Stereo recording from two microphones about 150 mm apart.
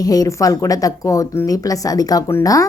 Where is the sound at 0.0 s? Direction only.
25° left (ahead or behind).